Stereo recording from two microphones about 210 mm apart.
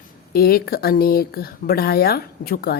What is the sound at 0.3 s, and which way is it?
Speech, 45° left (ahead or behind).